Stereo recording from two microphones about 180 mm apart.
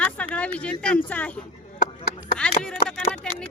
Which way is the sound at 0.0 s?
5° left (ahead or behind).